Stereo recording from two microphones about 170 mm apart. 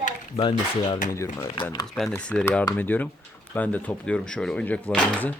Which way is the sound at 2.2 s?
5° left (ahead or behind).